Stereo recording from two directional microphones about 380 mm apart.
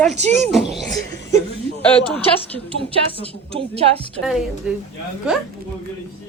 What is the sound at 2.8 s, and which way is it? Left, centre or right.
Speech, centre.